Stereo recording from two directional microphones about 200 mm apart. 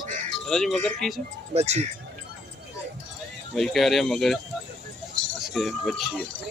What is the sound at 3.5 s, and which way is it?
Speech, centre (ahead or behind).